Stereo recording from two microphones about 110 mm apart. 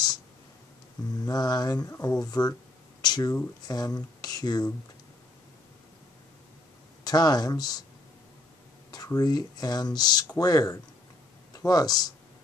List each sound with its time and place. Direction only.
1.2 s speech: 35° left (ahead or behind)
3.0 s a sound: 35° left (ahead or behind)
3.6 s speech: 35° left (ahead or behind)
7.1 s speech: 35° left (ahead or behind)
8.9 s speech: 35° left (ahead or behind)